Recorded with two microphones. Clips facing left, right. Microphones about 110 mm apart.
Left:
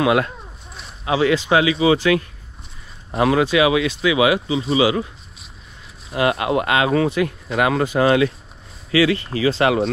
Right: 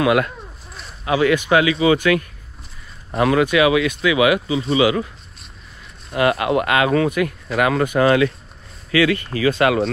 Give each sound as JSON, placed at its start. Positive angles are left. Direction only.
{"t": 0.0, "sound": "speech", "side_deg": 30}
{"t": 3.2, "sound": "speech", "side_deg": 30}
{"t": 6.1, "sound": "speech", "side_deg": 30}